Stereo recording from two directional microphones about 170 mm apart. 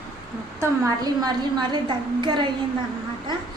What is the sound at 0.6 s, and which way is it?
Speech, 20° right (ahead or behind).